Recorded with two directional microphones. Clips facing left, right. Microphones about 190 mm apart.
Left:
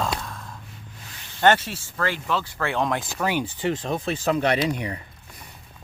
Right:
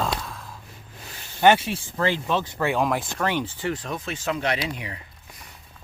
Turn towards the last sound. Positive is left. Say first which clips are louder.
# left 5 dB
turn(degrees=40)  # may be behind; listen again after turning